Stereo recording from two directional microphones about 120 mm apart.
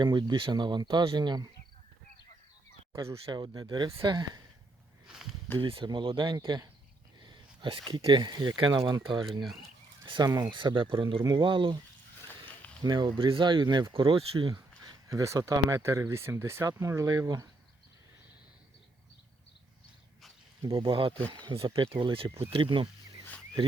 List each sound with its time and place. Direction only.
0.0 s speech: 40° right (ahead or behind)
2.9 s speech: 25° right (ahead or behind)
3.3 s speech: 35° right (ahead or behind)
5.0 s a sound: 5° right (ahead or behind)
5.5 s speech: 45° right (ahead or behind)
8.8 s speech: 25° right (ahead or behind)
9.2 s speech: centre (ahead or behind)
10.5 s speech: 45° right (ahead or behind)
12.5 s a sound: 10° left (ahead or behind)
12.8 s speech: 35° right (ahead or behind)
14.8 s speech: 25° right (ahead or behind)
20.6 s speech: 40° right (ahead or behind)